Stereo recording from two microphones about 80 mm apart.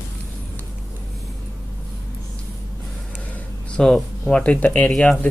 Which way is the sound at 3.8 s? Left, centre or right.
Centre.